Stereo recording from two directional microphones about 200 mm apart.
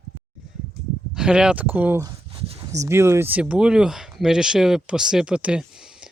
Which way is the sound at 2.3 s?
25° right (ahead or behind).